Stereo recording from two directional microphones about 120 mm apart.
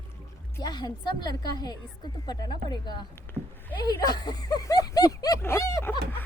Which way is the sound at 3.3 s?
15° left (ahead or behind).